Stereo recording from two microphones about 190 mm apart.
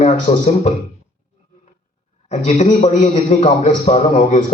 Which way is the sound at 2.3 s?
40° left (ahead or behind).